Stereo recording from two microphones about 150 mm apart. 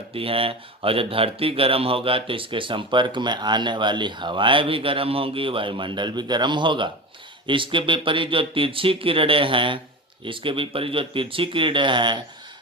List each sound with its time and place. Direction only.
0.1 s speech: 40° right (ahead or behind)